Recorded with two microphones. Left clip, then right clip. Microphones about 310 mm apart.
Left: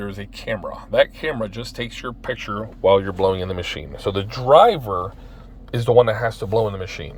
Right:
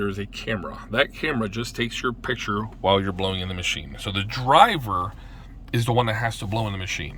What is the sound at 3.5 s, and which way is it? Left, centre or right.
Speech, centre.